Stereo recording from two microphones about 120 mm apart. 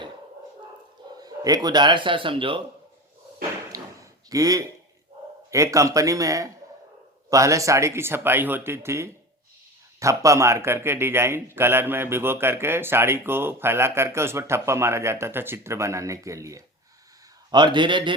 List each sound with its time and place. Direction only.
1.2 s speech: 35° right (ahead or behind)
4.3 s a man's voice: 30° right (ahead or behind)
17.5 s a man's voice: 40° right (ahead or behind)